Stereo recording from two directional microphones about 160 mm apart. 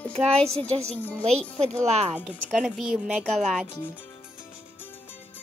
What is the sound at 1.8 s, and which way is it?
Speech, 40° right (ahead or behind).